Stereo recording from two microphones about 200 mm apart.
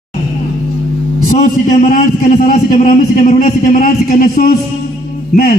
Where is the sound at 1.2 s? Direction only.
35° left (ahead or behind).